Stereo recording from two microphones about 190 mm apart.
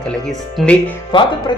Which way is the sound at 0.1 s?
5° left (ahead or behind).